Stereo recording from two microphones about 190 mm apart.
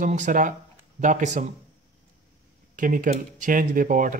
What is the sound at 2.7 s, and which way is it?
Speech, 45° right (ahead or behind).